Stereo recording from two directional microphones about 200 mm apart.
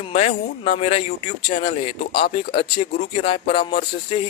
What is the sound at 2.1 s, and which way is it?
Speech, 50° left (ahead or behind).